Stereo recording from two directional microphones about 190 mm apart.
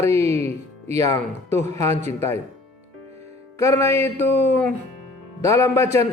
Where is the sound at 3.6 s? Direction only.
15° left (ahead or behind).